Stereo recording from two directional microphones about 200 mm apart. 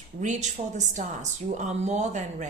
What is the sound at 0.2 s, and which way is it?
A woman's voice, 35° right (ahead or behind).